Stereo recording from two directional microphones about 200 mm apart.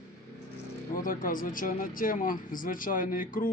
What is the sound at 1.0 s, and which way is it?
Speech, 45° left (ahead or behind).